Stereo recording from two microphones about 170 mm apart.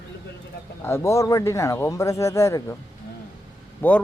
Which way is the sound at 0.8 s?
15° left (ahead or behind).